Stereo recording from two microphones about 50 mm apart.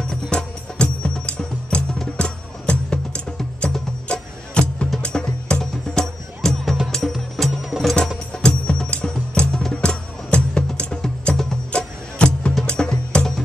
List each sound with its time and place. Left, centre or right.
0.0 s music: centre
8.3 s music: centre